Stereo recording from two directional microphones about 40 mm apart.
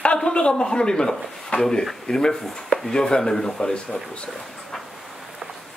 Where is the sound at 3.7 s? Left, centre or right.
Left.